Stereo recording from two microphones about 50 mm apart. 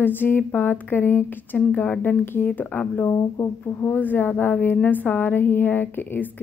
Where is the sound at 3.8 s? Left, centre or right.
Left.